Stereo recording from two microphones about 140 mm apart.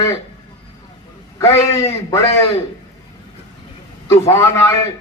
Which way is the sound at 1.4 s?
25° left (ahead or behind).